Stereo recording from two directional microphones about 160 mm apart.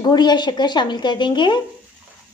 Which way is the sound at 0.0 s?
25° left (ahead or behind).